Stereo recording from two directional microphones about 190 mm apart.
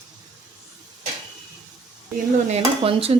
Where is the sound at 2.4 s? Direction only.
30° right (ahead or behind).